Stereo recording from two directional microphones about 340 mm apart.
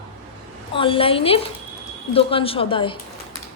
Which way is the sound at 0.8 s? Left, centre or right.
Centre.